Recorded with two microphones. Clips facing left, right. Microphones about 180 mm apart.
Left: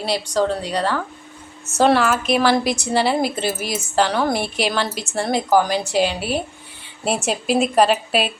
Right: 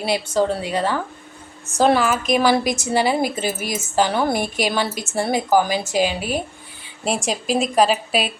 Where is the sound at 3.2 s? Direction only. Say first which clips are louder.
Even; 45° right (ahead or behind).